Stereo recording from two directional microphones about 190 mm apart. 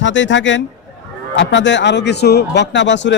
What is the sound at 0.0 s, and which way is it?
A man's voice, 75° left (ahead or behind).